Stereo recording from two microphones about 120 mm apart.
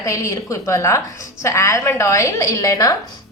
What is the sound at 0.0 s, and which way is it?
A woman's voice, 25° left (ahead or behind).